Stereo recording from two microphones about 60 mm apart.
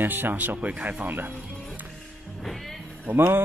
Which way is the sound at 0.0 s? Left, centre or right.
Right.